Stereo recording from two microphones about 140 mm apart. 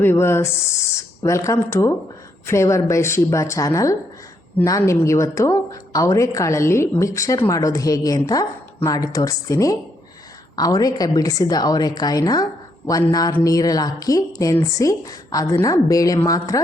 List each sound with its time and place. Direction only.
0.0 s a woman's voice: 15° left (ahead or behind)